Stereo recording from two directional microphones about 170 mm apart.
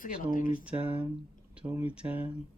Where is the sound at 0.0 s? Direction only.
55° left (ahead or behind).